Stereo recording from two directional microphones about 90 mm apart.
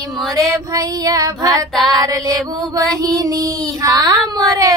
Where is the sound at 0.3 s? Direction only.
40° right (ahead or behind).